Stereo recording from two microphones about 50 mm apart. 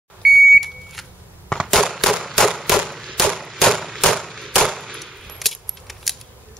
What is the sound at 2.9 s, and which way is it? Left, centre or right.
Gunshot, centre.